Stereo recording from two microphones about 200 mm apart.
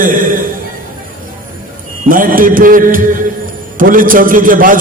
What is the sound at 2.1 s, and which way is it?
A man's voice, 45° right (ahead or behind).